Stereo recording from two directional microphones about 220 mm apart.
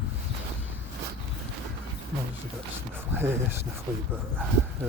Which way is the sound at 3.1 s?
10° right (ahead or behind).